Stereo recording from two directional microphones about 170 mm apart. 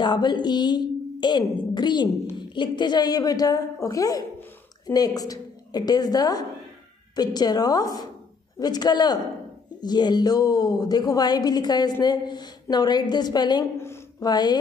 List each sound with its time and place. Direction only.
0.0 s a woman's voice: 25° left (ahead or behind)